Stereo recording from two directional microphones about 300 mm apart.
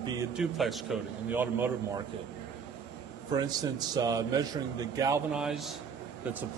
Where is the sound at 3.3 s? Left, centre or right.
Centre.